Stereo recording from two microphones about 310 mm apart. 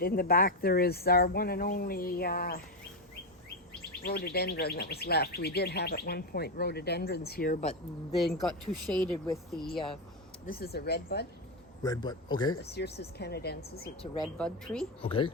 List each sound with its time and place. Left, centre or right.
0.0 s speech: left
4.0 s speech: left
8.2 s speech: centre
9.7 s a man's voice: centre
10.4 s speech: left
11.8 s a man's voice: centre
12.6 s speech: left
14.0 s speech: centre
14.3 s speech: centre
15.0 s a man's voice: centre